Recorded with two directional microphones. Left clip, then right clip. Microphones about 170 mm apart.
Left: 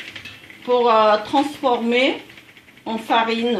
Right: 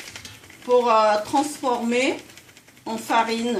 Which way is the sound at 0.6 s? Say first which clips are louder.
Left 2 dB; 30° left (ahead or behind).